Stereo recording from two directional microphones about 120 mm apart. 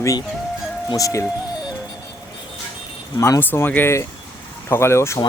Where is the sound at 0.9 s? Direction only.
30° left (ahead or behind).